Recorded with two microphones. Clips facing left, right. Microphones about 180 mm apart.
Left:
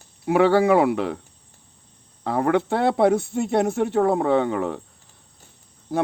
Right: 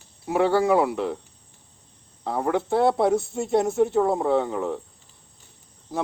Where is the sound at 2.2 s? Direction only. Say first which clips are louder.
Left 4 dB; 70° left (ahead or behind).